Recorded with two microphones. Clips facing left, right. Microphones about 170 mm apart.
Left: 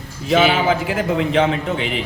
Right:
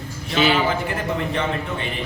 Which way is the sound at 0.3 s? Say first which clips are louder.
Left 4 dB; 90° left.